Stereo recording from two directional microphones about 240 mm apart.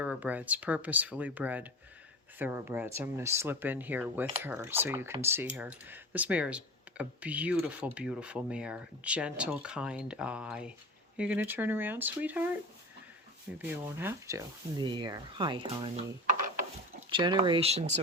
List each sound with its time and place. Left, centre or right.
0.0 s speech: centre
13.6 s speech: centre